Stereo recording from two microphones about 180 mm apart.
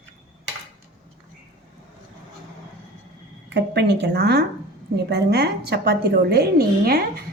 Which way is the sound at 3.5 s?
70° right (ahead or behind).